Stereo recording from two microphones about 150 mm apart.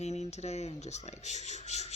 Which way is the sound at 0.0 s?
50° left (ahead or behind).